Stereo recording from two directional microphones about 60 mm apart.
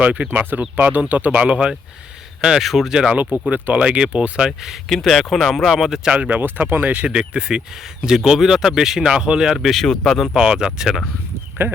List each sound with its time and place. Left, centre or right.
0.0 s speech: right
2.4 s speech: centre
3.5 s speech: right
4.4 s speech: centre
6.0 s speech: centre
6.4 s speech: right; by 9.6 s centre
9.6 s speech: centre
10.2 s speech: centre
11.6 s speech: right